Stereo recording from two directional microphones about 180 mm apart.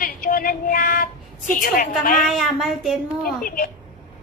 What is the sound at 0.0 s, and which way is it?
Female singing, 50° left (ahead or behind).